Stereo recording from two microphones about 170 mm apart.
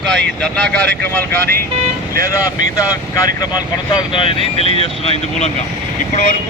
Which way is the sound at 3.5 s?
30° left (ahead or behind).